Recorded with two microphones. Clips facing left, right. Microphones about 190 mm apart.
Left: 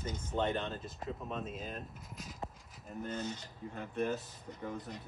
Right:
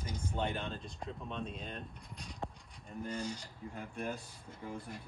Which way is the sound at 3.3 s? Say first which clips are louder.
Left 1 dB; 20° left (ahead or behind).